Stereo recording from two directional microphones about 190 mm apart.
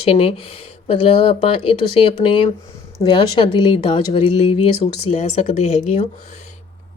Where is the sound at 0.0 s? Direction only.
30° left (ahead or behind).